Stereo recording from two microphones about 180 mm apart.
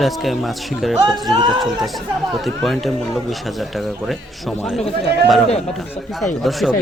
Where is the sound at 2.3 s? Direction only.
Centre (ahead or behind).